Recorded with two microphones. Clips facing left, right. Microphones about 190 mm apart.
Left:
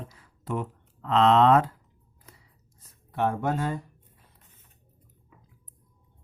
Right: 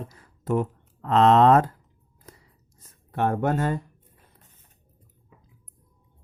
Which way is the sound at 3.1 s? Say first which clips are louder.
Right 3 dB; 55° right (ahead or behind).